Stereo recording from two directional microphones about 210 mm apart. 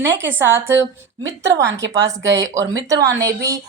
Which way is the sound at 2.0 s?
15° right (ahead or behind).